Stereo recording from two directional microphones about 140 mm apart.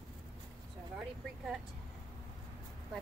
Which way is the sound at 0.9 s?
5° right (ahead or behind).